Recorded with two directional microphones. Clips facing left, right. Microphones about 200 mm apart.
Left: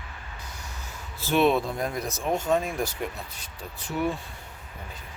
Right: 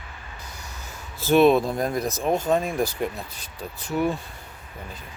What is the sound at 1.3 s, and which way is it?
Speech, 40° right (ahead or behind).